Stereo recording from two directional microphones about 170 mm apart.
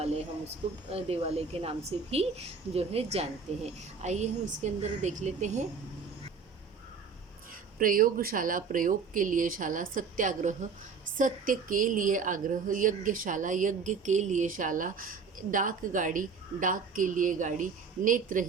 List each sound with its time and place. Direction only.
0.9 s a woman's voice: 35° right (ahead or behind)
7.8 s a woman's voice: 55° right (ahead or behind)